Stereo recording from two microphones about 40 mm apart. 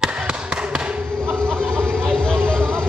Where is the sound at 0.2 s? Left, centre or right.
Right.